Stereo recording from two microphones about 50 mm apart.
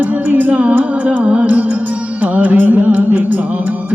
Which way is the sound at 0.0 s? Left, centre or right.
Right.